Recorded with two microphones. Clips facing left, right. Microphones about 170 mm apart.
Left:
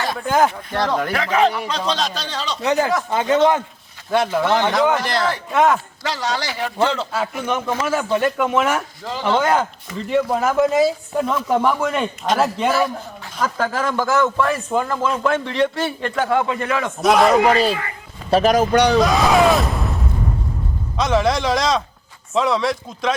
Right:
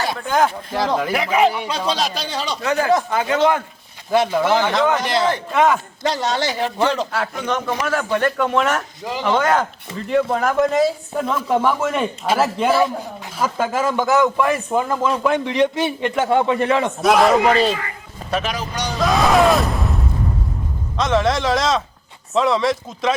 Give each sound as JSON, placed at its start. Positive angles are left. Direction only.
{"t": 0.2, "sound": "speech", "side_deg": 0}
{"t": 1.1, "sound": "a man's voice", "side_deg": -10}
{"t": 2.6, "sound": "speech", "side_deg": 20}
{"t": 4.1, "sound": "speech", "side_deg": 0}
{"t": 4.7, "sound": "speech", "side_deg": 5}
{"t": 6.1, "sound": "a man's voice", "side_deg": -20}
{"t": 7.1, "sound": "a man's voice", "side_deg": 10}
{"t": 17.0, "sound": "speech", "side_deg": 0}
{"t": 18.3, "sound": "speech", "side_deg": 40}
{"t": 18.7, "sound": "speech", "side_deg": 65}
{"t": 18.9, "sound": "speech", "side_deg": 0}
{"t": 20.9, "sound": "speech", "side_deg": 0}